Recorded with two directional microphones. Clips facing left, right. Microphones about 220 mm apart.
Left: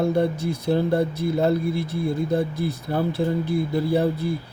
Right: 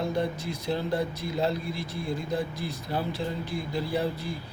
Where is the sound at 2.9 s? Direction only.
50° left (ahead or behind).